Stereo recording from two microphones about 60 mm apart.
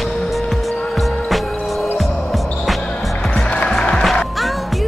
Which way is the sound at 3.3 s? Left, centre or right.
Centre.